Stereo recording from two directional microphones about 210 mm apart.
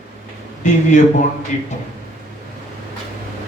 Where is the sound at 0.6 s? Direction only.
35° left (ahead or behind).